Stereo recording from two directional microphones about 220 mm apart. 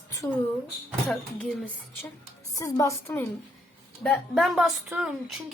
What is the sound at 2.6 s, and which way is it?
A woman's voice, 15° left (ahead or behind).